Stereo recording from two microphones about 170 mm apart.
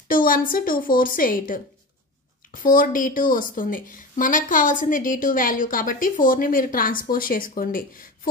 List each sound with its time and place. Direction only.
0.1 s a woman's voice: 55° left (ahead or behind)